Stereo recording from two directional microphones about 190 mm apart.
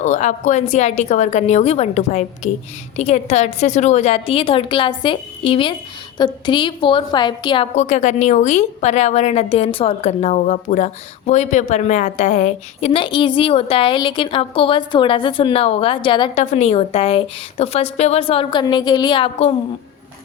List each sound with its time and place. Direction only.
0.0 s a woman's voice: 40° left (ahead or behind)
7.8 s a woman's voice: 40° left (ahead or behind)
16.4 s a woman's voice: 35° left (ahead or behind)